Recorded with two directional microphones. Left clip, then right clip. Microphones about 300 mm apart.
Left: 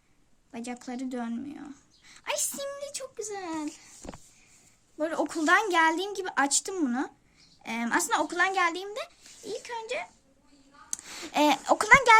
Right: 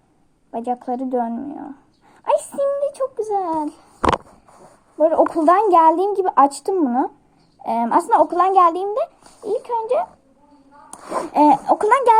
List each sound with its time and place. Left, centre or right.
0.5 s speech: left
2.0 s a sound: left
4.9 s speech: left
11.3 s speech: left